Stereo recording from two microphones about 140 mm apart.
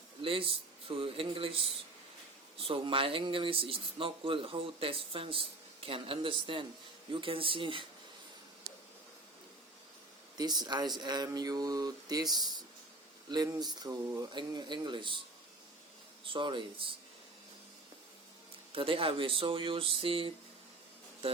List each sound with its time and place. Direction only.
0.2 s speech: 40° right (ahead or behind)
10.3 s speech: 30° right (ahead or behind)
16.2 s speech: 35° right (ahead or behind)
18.7 s speech: 40° right (ahead or behind)